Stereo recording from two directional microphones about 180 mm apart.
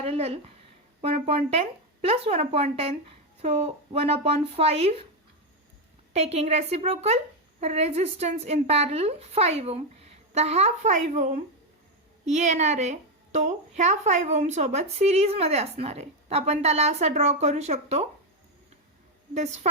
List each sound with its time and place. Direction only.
0.0 s a sound: 35° right (ahead or behind)
1.0 s a woman's voice: 35° right (ahead or behind)
6.1 s a woman's voice: 35° right (ahead or behind)
19.3 s a woman's voice: 40° right (ahead or behind)